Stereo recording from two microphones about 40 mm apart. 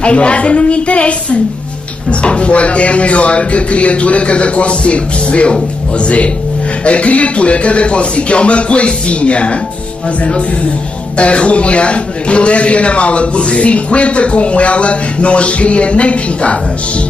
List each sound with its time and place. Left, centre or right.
0.0 s a woman's voice: left